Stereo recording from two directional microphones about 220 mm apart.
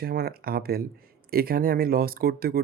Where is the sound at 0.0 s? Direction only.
45° right (ahead or behind).